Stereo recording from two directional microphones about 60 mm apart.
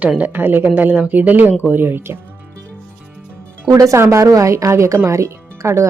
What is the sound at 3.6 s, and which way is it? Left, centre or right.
Speech, right.